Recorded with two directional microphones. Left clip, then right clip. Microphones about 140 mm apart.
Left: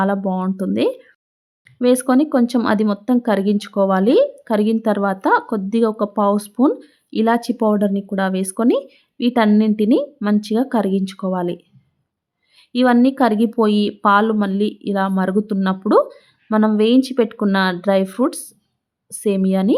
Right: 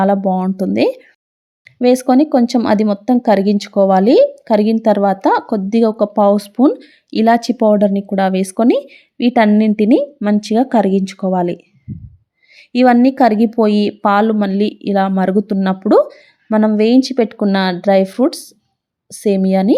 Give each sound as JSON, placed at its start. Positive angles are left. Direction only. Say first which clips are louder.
{"t": 0.0, "sound": "speech", "louder": "right 6 dB", "side_deg": -20}